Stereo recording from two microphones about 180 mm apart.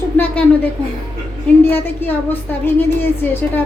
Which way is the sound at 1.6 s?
10° left (ahead or behind).